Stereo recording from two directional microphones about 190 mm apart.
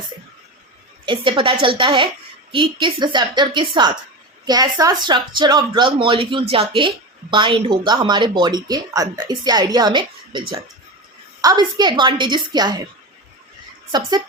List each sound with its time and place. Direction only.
1.0 s a woman's voice: 25° right (ahead or behind)
13.9 s a woman's voice: 20° right (ahead or behind)